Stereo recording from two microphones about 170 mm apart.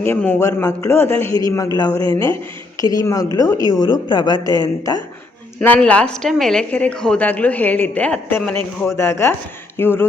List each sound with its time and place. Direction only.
0.0 s speech: 10° left (ahead or behind)
5.5 s speech: 10° left (ahead or behind)
9.0 s speech: 15° left (ahead or behind)